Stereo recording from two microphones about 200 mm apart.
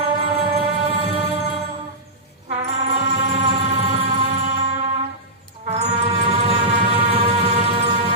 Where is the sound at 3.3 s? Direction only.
30° right (ahead or behind).